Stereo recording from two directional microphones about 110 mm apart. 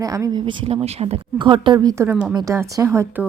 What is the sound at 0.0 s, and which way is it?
Speech, 30° right (ahead or behind).